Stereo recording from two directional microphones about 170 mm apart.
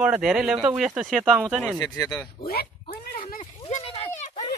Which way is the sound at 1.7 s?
20° left (ahead or behind).